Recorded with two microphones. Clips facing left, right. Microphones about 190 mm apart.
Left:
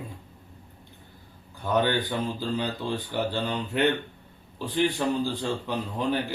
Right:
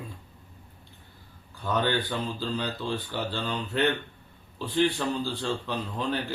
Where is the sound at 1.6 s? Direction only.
15° left (ahead or behind).